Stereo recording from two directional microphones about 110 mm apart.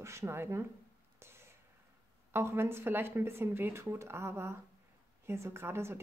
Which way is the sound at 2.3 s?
20° right (ahead or behind).